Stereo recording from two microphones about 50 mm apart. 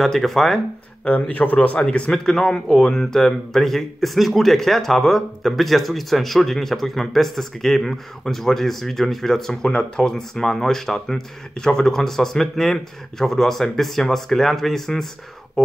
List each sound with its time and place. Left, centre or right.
0.0 s speech: centre
1.3 s speech: left
1.8 s speech: centre